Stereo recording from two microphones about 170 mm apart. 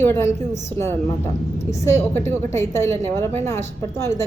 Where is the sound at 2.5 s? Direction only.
15° left (ahead or behind).